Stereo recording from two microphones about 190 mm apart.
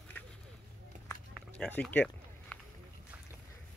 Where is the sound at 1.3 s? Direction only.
5° left (ahead or behind).